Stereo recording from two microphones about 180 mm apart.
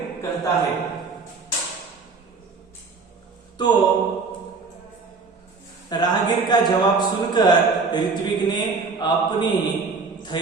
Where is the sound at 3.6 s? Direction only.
25° left (ahead or behind).